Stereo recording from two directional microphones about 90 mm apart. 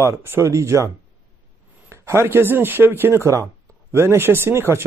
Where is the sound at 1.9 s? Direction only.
30° right (ahead or behind).